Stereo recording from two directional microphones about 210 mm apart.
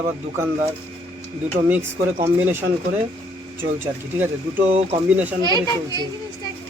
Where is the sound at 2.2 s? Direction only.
10° right (ahead or behind).